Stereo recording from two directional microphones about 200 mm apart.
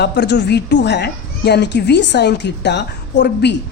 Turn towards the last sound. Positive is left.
turn(degrees=55)  # may be behind; listen again after turning